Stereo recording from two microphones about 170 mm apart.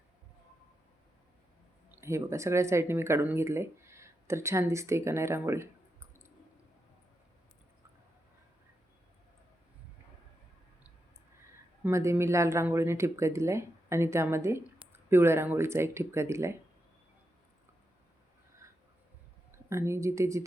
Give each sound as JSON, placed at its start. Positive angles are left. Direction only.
{"t": 1.9, "sound": "speech", "side_deg": -15}
{"t": 11.8, "sound": "speech", "side_deg": -15}
{"t": 19.5, "sound": "speech", "side_deg": -15}